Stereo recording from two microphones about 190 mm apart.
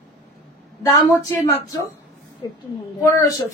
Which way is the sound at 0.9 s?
15° left (ahead or behind).